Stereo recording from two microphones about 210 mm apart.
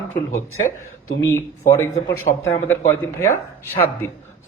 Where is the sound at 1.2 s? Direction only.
10° left (ahead or behind).